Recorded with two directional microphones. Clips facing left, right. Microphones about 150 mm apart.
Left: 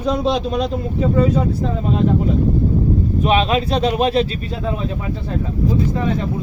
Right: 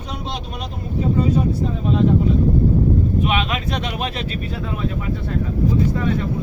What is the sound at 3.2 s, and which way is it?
Speech, 35° left (ahead or behind).